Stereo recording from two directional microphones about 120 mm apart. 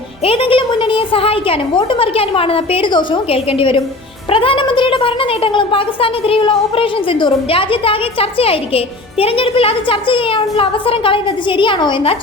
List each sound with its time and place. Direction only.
0.3 s speech: 50° left (ahead or behind)